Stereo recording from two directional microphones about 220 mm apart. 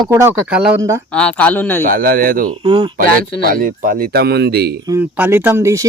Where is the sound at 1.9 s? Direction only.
40° right (ahead or behind).